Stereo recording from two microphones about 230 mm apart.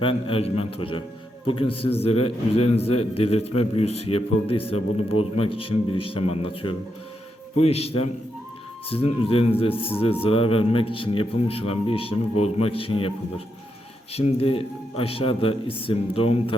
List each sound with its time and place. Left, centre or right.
0.0 s speech: left